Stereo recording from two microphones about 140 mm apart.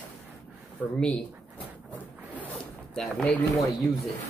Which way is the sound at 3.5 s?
20° left (ahead or behind).